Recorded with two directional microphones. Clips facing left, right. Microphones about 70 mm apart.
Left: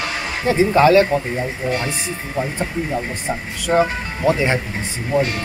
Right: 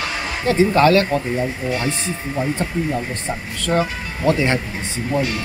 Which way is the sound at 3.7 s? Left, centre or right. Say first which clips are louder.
Left 3 dB; left.